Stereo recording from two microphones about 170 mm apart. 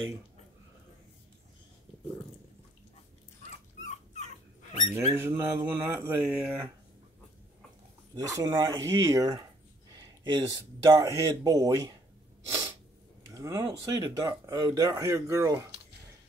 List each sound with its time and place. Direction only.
4.9 s speech: 15° right (ahead or behind)
8.1 s speech: 20° right (ahead or behind)
12.4 s sneeze: 15° right (ahead or behind)
13.3 s speech: 20° right (ahead or behind)